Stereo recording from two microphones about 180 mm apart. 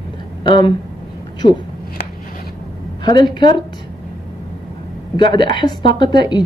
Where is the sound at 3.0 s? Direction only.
25° left (ahead or behind).